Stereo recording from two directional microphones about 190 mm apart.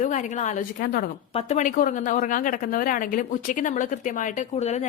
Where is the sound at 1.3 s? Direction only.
40° left (ahead or behind).